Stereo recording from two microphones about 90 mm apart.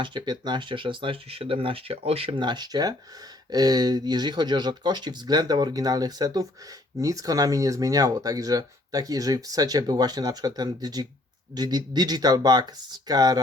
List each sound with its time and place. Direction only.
0.0 s speech: 55° right (ahead or behind)